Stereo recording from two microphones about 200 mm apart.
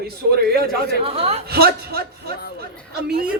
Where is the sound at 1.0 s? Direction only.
30° right (ahead or behind).